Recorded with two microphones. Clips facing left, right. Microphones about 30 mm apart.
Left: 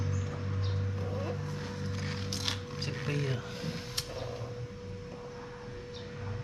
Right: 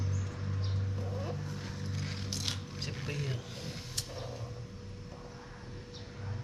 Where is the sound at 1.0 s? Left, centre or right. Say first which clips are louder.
Left 3 dB; left.